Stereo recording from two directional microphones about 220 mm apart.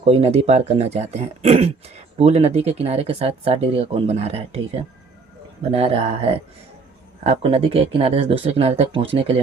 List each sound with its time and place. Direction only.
0.0 s speech: 30° right (ahead or behind)
7.3 s speech: 25° right (ahead or behind)